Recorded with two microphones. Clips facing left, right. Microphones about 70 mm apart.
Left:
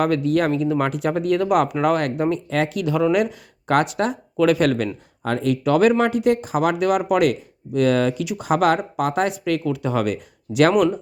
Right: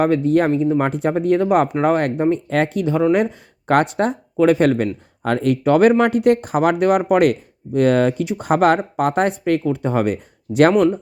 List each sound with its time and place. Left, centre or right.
0.0 s speech: right
5.2 s speech: right